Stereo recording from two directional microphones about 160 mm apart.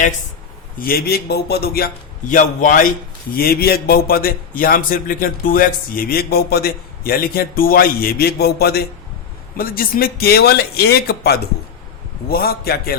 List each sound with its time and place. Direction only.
0.8 s a man's voice: 70° left (ahead or behind)
3.3 s a man's voice: 70° left (ahead or behind)
9.6 s a man's voice: 65° left (ahead or behind)